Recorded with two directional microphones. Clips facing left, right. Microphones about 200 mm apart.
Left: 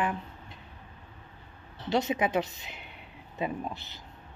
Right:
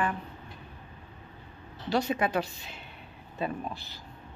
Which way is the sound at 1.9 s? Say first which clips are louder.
Even; 20° left (ahead or behind).